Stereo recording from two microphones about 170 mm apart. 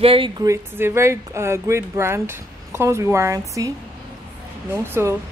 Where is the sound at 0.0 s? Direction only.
30° right (ahead or behind).